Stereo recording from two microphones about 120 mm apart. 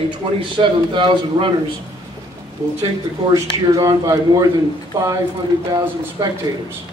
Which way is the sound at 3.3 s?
30° right (ahead or behind).